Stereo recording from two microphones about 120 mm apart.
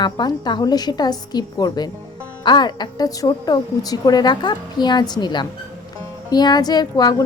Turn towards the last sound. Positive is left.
turn(degrees=35)  # may be behind; listen again after turning